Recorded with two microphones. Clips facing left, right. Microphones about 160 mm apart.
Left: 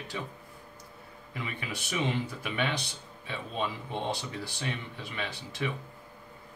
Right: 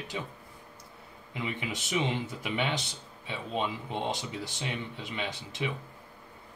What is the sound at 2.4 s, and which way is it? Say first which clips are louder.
Speech: right 1 dB; 20° right (ahead or behind).